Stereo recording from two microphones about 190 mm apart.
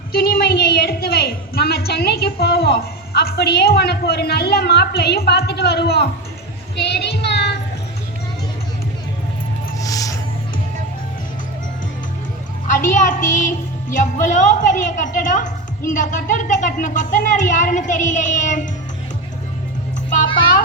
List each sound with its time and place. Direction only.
0.1 s a woman's voice: 50° left (ahead or behind)
6.7 s child singing: 60° left (ahead or behind)
9.7 s music: 20° left (ahead or behind)
12.6 s a woman's voice: 45° left (ahead or behind)